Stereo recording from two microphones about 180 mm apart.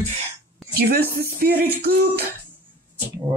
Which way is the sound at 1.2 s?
60° right (ahead or behind).